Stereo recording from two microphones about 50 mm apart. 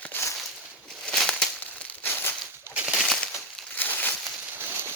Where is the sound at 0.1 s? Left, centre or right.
Left.